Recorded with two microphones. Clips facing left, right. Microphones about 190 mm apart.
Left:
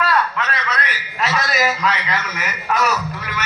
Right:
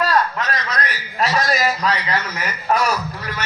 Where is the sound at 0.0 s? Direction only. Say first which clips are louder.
Right 1 dB; 35° right (ahead or behind).